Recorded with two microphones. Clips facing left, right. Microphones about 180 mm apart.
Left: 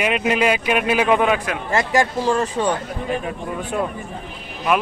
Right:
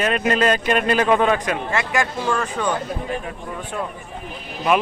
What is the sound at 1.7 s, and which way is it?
Speech, 35° left (ahead or behind).